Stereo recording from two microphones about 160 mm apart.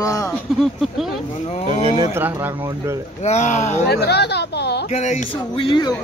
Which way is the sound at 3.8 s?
90° left.